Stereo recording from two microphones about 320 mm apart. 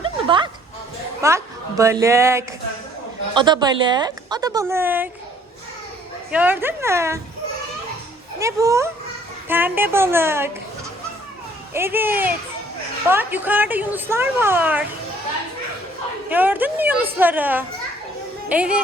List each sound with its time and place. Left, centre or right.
0.0 s a sound: centre
1.2 s a woman's voice: centre
6.3 s a woman's voice: centre
8.4 s a woman's voice: centre
11.7 s a woman's voice: centre
16.3 s a woman's voice: centre